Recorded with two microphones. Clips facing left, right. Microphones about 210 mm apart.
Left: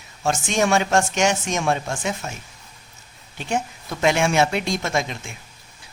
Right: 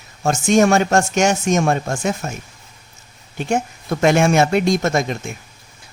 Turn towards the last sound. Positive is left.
turn(degrees=-50)  # may be behind; listen again after turning